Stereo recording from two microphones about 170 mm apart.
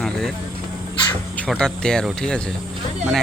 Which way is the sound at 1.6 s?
5° left (ahead or behind).